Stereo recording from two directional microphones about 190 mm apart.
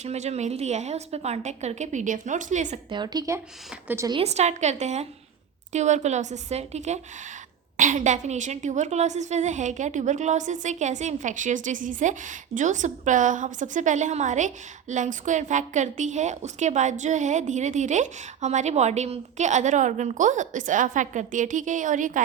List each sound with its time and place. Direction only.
0.0 s a woman's voice: 35° right (ahead or behind)
2.9 s speech: 20° right (ahead or behind)
4.1 s a woman's voice: 35° right (ahead or behind)